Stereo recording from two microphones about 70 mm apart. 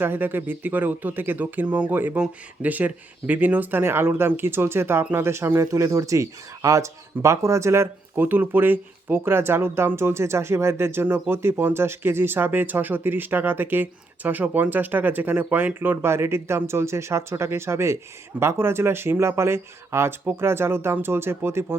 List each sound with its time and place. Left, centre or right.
0.0 s speech: right
5.7 s speech: right
8.1 s speech: right